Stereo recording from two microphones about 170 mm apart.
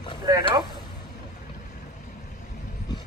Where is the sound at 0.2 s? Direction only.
20° right (ahead or behind).